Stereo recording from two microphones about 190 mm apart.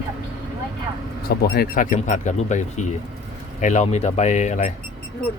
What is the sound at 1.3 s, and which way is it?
Speech, 55° left (ahead or behind).